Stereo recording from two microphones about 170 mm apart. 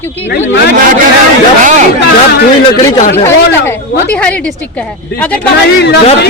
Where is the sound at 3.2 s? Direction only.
15° left (ahead or behind).